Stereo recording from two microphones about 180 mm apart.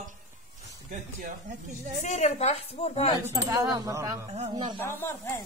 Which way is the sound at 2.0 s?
40° left (ahead or behind).